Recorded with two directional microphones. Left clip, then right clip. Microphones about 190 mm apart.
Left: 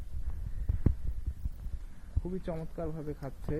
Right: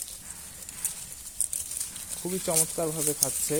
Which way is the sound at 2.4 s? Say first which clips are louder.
Right 12 dB; 15° right (ahead or behind).